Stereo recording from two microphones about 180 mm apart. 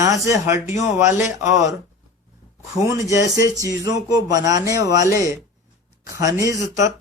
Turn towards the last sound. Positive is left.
turn(degrees=-15)  # may be behind; listen again after turning